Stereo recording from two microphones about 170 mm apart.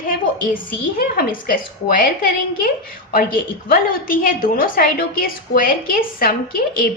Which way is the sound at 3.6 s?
55° left (ahead or behind).